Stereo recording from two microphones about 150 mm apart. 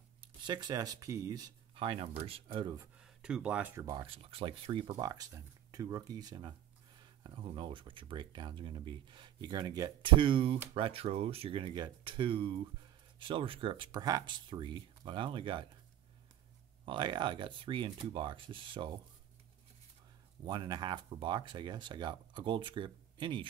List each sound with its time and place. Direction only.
0.2 s speech: 30° right (ahead or behind)
3.0 s speech: 5° right (ahead or behind)
3.9 s speech: 35° right (ahead or behind)
16.8 s speech: 30° right (ahead or behind)
20.4 s speech: 30° right (ahead or behind)